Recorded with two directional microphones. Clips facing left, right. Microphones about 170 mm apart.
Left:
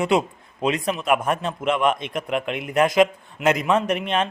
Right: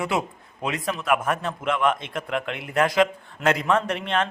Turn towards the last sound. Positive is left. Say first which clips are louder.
# left 3 dB
turn(degrees=15)  # may be behind; listen again after turning